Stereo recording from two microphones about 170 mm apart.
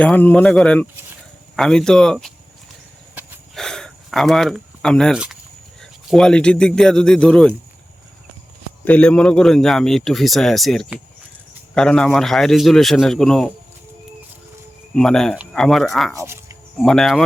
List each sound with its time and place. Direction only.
0.0 s a man's voice: 10° left (ahead or behind)
3.5 s a sound: 5° left (ahead or behind)
5.8 s a man's voice: 5° left (ahead or behind)
8.8 s a man's voice: 10° left (ahead or behind)
14.9 s a man's voice: 5° left (ahead or behind)
16.1 s speech: 15° right (ahead or behind)
16.8 s a man's voice: centre (ahead or behind)